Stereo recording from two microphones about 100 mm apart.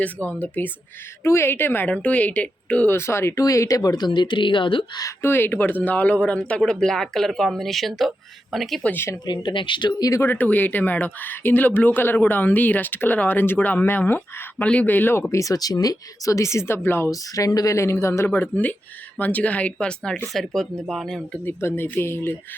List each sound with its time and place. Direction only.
0.0 s speech: 15° left (ahead or behind)
2.9 s speech: 25° left (ahead or behind); by 4.9 s 55° left (ahead or behind)
5.2 s speech: 20° left (ahead or behind); by 8.8 s centre (ahead or behind)
8.8 s speech: 15° left (ahead or behind)
9.2 s speech: 50° left (ahead or behind)
10.1 s speech: 25° left (ahead or behind)
15.3 s speech: 35° left (ahead or behind)
17.1 s speech: 35° left (ahead or behind)
18.3 s speech: 15° left (ahead or behind)
21.4 s speech: 25° left (ahead or behind)